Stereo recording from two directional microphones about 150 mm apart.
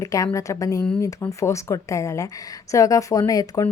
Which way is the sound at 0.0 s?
20° left (ahead or behind).